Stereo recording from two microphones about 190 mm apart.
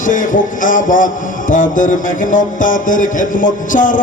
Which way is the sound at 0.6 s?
45° left (ahead or behind).